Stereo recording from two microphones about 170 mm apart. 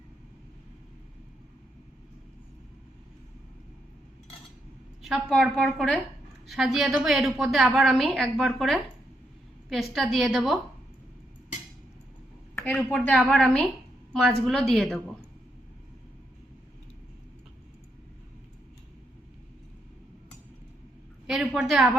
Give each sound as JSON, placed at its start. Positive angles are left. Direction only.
{"t": 5.0, "sound": "a woman's voice", "side_deg": 0}
{"t": 12.5, "sound": "a woman's voice", "side_deg": 10}
{"t": 21.2, "sound": "a woman's voice", "side_deg": 0}